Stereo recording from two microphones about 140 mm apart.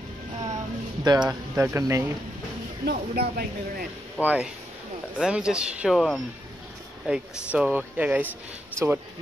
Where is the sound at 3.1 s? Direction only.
90° right.